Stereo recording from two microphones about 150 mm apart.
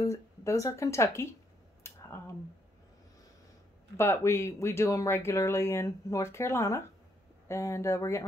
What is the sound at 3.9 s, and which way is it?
A woman's voice, 15° left (ahead or behind).